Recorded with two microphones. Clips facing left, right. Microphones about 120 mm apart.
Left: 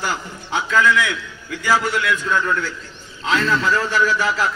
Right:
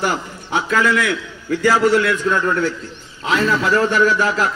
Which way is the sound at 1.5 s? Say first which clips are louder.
Right 6 dB; 35° right (ahead or behind).